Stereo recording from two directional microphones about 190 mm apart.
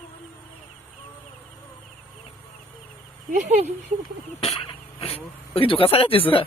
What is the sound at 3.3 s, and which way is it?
Speech, 35° right (ahead or behind).